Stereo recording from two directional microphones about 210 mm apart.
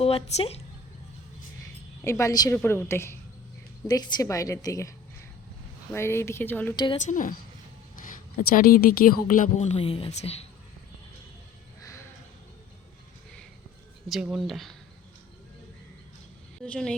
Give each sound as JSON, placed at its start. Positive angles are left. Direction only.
{"t": 0.0, "sound": "speech", "side_deg": 30}
{"t": 2.0, "sound": "a woman's voice", "side_deg": 15}
{"t": 6.7, "sound": "speech", "side_deg": 20}
{"t": 7.0, "sound": "a woman's voice", "side_deg": 40}
{"t": 14.1, "sound": "speech", "side_deg": 0}
{"t": 16.6, "sound": "speech", "side_deg": 5}